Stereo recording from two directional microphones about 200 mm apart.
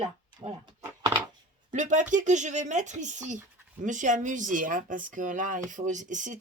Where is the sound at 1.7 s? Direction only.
40° right (ahead or behind).